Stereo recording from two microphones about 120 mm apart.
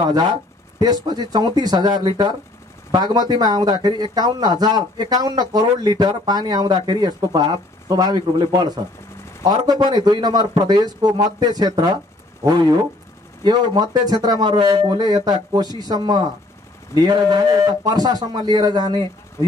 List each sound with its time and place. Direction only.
0.7 s speech: 35° right (ahead or behind)